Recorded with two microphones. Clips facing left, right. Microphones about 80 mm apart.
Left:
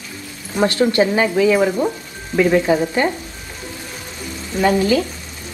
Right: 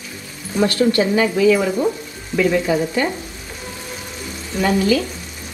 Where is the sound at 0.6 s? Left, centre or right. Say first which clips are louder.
Left 1 dB; left.